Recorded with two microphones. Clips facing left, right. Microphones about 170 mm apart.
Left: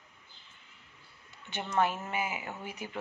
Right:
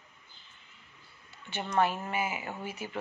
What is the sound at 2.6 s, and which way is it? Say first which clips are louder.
Speech: right 2 dB; 15° left (ahead or behind).